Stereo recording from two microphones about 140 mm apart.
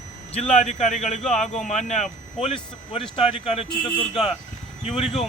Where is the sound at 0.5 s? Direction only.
55° left (ahead or behind).